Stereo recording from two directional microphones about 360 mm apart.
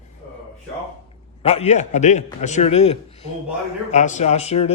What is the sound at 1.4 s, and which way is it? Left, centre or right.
Speech, centre.